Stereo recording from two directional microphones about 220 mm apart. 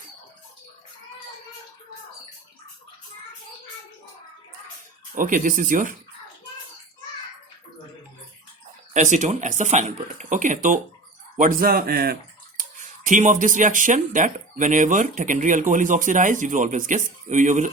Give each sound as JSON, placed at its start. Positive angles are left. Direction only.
{"t": 5.1, "sound": "speech", "side_deg": -35}
{"t": 8.9, "sound": "speech", "side_deg": -35}